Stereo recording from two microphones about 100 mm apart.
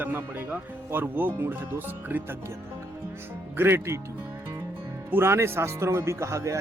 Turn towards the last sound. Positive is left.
turn(degrees=-30)  # may be behind; listen again after turning